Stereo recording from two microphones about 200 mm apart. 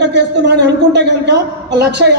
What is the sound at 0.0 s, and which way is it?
A man's voice, 60° right (ahead or behind).